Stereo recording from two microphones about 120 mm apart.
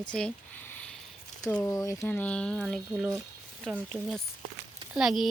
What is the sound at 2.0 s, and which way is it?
Speech, 10° left (ahead or behind).